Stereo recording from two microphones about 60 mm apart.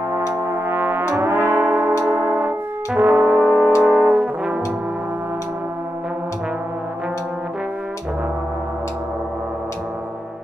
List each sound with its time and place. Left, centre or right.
0.5 s brass instrument: right
1.1 s music: right
3.0 s brass instrument: right
3.4 s music: left
3.8 s brass instrument: right